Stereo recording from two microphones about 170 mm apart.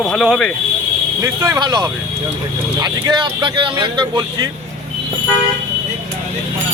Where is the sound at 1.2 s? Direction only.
15° right (ahead or behind).